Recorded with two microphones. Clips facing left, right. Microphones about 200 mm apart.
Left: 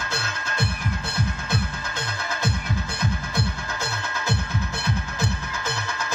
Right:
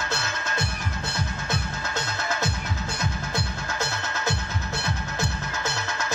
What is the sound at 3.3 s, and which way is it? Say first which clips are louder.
Music: left 1 dB; 55° left (ahead or behind).